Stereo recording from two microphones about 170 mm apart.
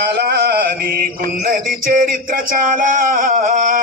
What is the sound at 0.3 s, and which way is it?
Music, 60° right (ahead or behind).